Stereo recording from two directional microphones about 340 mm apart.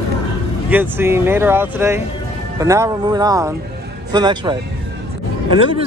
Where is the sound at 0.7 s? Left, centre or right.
Centre.